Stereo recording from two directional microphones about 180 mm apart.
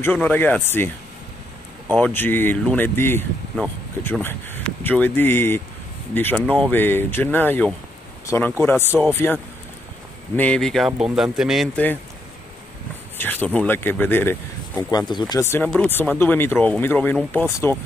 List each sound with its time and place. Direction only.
0.0 s speech: 10° left (ahead or behind)
13.2 s speech: 10° left (ahead or behind)
14.8 s speech: 20° left (ahead or behind)